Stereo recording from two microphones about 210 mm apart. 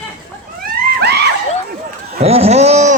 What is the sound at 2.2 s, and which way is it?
Speech, 30° right (ahead or behind).